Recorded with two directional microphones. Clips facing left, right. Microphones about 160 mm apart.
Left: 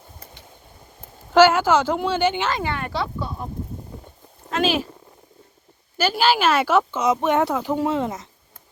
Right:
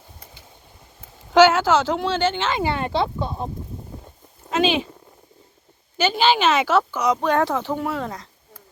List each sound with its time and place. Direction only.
1.3 s speech: 10° left (ahead or behind)
2.6 s speech: 25° right (ahead or behind)
4.5 s speech: centre (ahead or behind)
6.0 s speech: 5° left (ahead or behind)
6.9 s speech: 25° left (ahead or behind)
7.4 s speech: 5° left (ahead or behind)
7.7 s speech: 20° left (ahead or behind)